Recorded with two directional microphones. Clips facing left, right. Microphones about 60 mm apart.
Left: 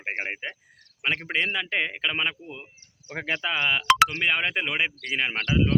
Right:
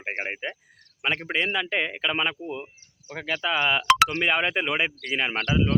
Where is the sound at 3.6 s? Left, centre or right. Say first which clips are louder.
Even; centre.